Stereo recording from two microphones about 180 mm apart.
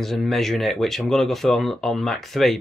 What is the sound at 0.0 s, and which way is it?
Speech, centre (ahead or behind).